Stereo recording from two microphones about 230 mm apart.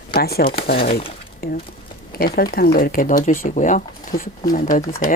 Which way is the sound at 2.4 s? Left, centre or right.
Left.